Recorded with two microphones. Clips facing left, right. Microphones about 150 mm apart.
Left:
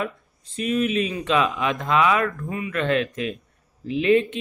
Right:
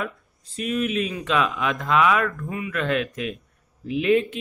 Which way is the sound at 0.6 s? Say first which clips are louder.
Left 2 dB; centre (ahead or behind).